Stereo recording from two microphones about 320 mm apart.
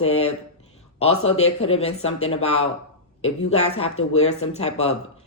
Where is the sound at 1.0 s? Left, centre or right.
Centre.